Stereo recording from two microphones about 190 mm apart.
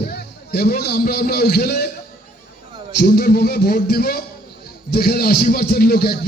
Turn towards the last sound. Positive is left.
turn(degrees=55)  # may be behind; listen again after turning